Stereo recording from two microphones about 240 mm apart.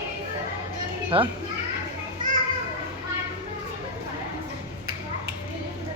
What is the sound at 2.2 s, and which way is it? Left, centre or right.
Children playing, right.